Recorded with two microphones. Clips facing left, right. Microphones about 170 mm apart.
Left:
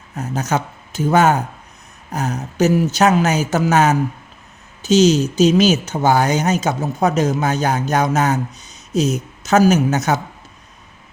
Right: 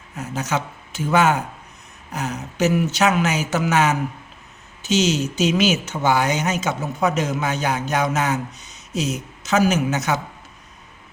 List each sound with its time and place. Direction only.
0.2 s speech: 40° left (ahead or behind)